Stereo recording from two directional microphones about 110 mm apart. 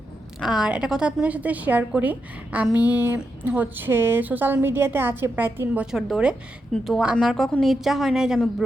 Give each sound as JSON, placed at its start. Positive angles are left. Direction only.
{"t": 0.3, "sound": "a woman's voice", "side_deg": -5}